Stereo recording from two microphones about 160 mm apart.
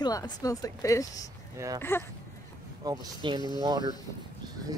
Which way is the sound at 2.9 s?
25° right (ahead or behind).